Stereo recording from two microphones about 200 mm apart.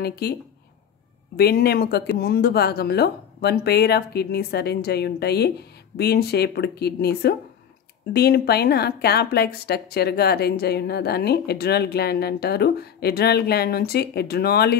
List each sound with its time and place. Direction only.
0.0 s a woman's voice: 55° left (ahead or behind)
1.3 s a woman's voice: 50° left (ahead or behind)